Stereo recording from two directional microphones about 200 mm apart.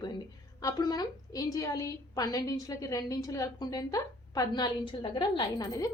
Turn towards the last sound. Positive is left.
turn(degrees=15)  # may be behind; listen again after turning